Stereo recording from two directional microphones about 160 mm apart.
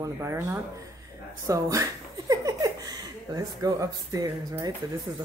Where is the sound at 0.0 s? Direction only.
20° right (ahead or behind).